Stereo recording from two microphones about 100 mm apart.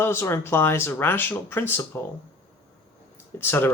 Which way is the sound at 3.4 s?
25° left (ahead or behind).